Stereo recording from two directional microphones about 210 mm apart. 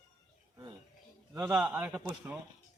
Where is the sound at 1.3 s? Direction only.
10° right (ahead or behind).